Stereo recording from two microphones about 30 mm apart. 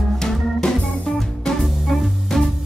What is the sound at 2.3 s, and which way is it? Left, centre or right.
Music, centre.